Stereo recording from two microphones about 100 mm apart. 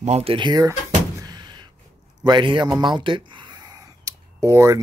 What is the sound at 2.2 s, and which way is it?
Speech, 50° right (ahead or behind).